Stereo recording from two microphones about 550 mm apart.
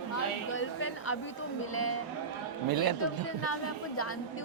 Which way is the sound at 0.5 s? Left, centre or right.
Left.